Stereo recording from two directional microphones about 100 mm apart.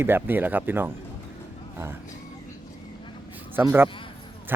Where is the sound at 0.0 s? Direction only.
20° right (ahead or behind).